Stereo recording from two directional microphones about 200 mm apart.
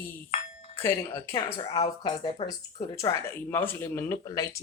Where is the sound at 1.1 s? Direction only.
15° left (ahead or behind).